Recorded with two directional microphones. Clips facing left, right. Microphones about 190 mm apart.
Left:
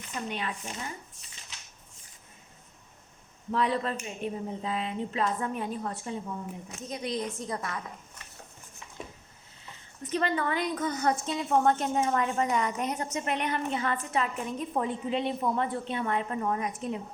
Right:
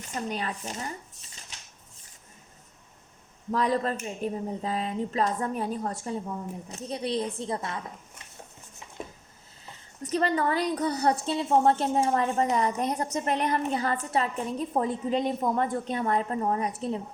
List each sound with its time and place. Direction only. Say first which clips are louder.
0.1 s a woman's voice: right 3 dB; 40° right (ahead or behind)
3.5 s a woman's voice: right 2 dB; 40° right (ahead or behind)
10.0 s a woman's voice: right 3 dB; 40° right (ahead or behind)